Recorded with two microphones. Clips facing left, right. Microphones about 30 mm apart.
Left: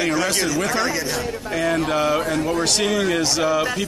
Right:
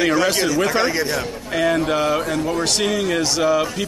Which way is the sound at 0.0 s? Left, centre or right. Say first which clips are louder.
Right 3 dB; centre.